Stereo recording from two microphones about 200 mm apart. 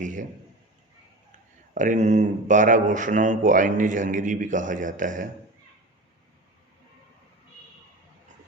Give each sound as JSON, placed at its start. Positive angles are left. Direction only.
{"t": 0.0, "sound": "speech", "side_deg": -40}
{"t": 1.7, "sound": "speech", "side_deg": -40}